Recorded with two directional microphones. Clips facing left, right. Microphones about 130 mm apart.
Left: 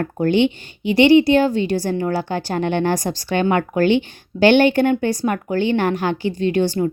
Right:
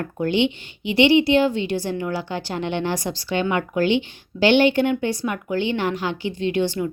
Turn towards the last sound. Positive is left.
turn(degrees=40)  # may be behind; listen again after turning